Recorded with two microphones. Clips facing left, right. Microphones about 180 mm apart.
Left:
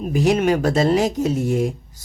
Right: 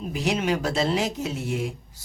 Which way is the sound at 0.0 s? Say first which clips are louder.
Left 8 dB; 50° left (ahead or behind).